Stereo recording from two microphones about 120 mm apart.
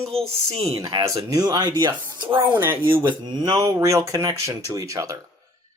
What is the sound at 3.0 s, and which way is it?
Speech, 40° right (ahead or behind).